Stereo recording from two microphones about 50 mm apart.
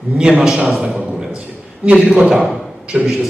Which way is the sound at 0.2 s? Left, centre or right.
Centre.